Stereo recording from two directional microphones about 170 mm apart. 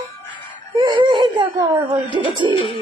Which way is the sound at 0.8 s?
25° right (ahead or behind).